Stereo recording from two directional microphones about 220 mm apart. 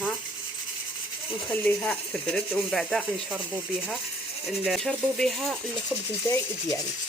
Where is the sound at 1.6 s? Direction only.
5° left (ahead or behind).